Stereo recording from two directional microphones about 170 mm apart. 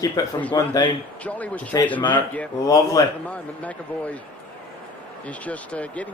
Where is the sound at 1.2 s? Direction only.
10° left (ahead or behind).